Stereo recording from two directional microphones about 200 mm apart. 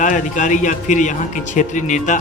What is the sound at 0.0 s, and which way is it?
A man's voice, 40° left (ahead or behind).